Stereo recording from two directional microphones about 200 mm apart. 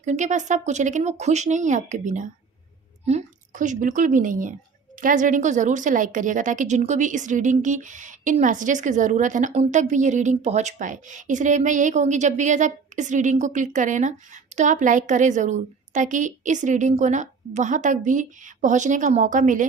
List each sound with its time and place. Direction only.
0.0 s a woman's voice: 35° right (ahead or behind)